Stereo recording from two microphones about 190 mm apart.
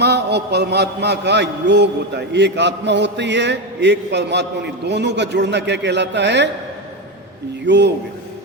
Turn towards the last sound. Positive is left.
turn(degrees=-65)  # may be behind; listen again after turning